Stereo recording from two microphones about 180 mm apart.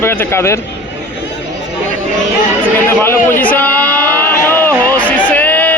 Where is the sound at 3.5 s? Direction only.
10° left (ahead or behind).